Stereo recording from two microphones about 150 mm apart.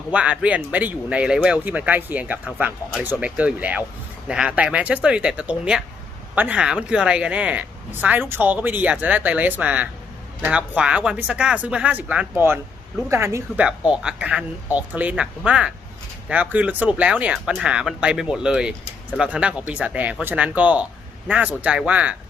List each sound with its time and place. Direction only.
0.1 s speech: 10° right (ahead or behind)